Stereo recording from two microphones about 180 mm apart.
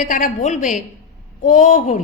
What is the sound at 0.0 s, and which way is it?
A woman's voice, 45° left (ahead or behind).